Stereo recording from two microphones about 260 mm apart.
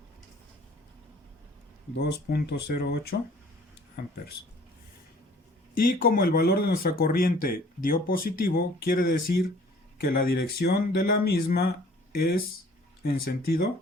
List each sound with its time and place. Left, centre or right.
2.0 s speech: left
5.7 s speech: left